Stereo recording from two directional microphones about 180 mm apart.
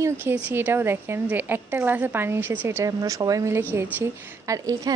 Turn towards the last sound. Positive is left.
turn(degrees=-20)  # may be behind; listen again after turning